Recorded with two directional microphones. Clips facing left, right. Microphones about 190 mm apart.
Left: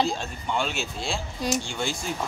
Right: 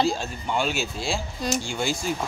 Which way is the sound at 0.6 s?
5° right (ahead or behind).